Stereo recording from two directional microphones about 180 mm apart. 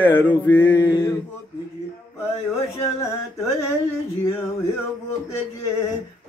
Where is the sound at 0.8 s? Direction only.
20° left (ahead or behind).